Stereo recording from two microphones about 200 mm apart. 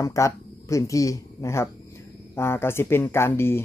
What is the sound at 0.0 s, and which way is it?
Speech, 15° left (ahead or behind).